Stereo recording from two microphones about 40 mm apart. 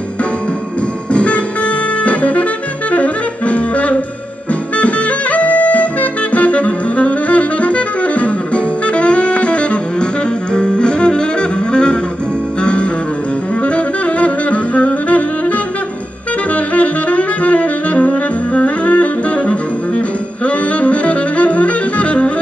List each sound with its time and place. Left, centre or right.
1.1 s music: left
2.0 s saxophone: left
10.5 s music: left
13.7 s saxophone: left
16.5 s saxophone: left